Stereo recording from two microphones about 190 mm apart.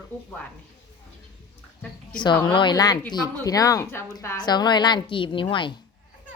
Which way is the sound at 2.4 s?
25° left (ahead or behind).